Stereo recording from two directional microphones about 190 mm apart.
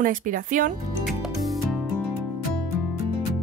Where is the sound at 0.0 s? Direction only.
45° right (ahead or behind).